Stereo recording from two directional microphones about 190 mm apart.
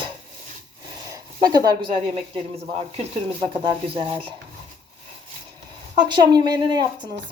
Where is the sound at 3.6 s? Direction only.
25° right (ahead or behind).